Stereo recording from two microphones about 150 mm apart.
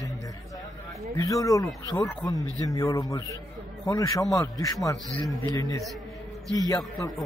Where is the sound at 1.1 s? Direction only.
20° left (ahead or behind).